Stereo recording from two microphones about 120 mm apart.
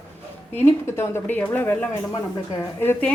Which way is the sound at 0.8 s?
20° left (ahead or behind).